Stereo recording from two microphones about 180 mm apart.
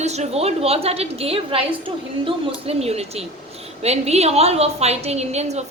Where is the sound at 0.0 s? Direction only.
40° right (ahead or behind).